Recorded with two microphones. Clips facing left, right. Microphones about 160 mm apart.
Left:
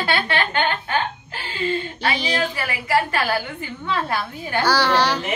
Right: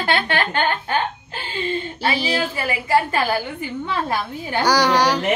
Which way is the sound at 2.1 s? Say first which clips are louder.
Right 1 dB; 5° right (ahead or behind).